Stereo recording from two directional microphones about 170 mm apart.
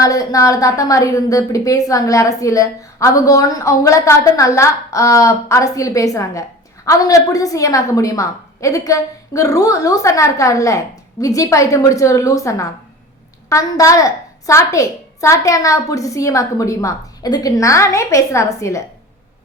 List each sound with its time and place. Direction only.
0.0 s a woman's voice: 20° left (ahead or behind)